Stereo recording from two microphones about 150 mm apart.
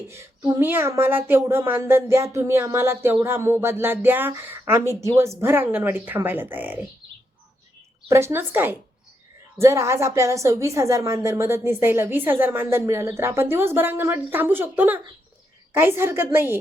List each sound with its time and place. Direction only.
0.1 s a woman's voice: 15° right (ahead or behind)
8.0 s a woman's voice: 20° right (ahead or behind)